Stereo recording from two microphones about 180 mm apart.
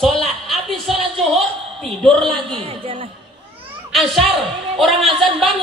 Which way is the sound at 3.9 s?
Centre (ahead or behind).